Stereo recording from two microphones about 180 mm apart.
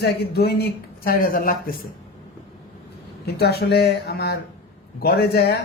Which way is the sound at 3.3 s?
65° left (ahead or behind).